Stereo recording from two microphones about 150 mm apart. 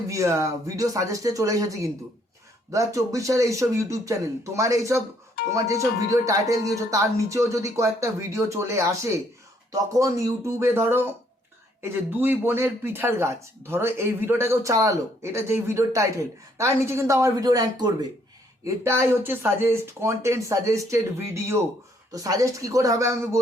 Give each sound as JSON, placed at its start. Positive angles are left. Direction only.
{"t": 0.1, "sound": "speech", "side_deg": -20}